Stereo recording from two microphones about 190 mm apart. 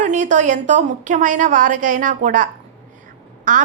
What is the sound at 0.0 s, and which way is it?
A woman's voice, 40° right (ahead or behind).